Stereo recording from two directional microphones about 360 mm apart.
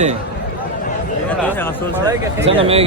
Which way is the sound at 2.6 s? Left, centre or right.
Centre.